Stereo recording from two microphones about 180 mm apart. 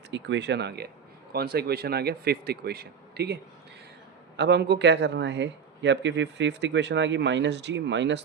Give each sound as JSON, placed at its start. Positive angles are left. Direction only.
{"t": 0.1, "sound": "a man's voice", "side_deg": -80}
{"t": 4.4, "sound": "a man's voice", "side_deg": -70}